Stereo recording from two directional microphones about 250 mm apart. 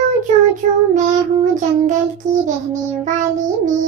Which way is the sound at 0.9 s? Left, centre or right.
Right.